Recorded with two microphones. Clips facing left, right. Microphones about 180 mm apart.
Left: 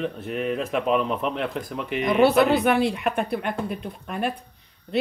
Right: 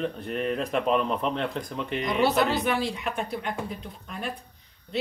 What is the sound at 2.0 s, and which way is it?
Speech, 55° left (ahead or behind).